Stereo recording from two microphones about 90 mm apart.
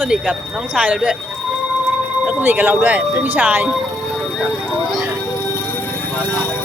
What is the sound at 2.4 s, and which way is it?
Speech, 25° right (ahead or behind).